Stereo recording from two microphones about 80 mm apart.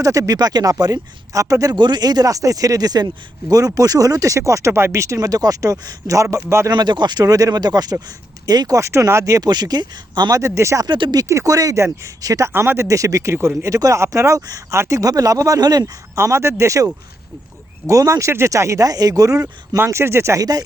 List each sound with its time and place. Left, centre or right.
0.0 s speech: right
1.7 s speech: right
6.3 s speech: right
6.7 s speech: right
9.5 s speech: right
10.3 s speech: right
10.8 s speech: right
11.3 s speech: right
12.5 s speech: right
16.1 s speech: right
20.4 s speech: right